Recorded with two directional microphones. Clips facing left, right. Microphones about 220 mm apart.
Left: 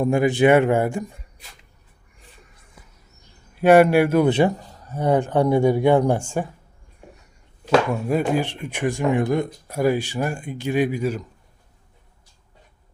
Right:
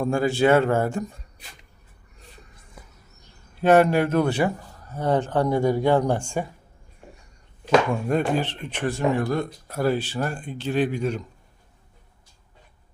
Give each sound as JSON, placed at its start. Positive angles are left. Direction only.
{"t": 0.0, "sound": "speech", "side_deg": 20}
{"t": 3.6, "sound": "speech", "side_deg": 10}
{"t": 7.7, "sound": "speech", "side_deg": 5}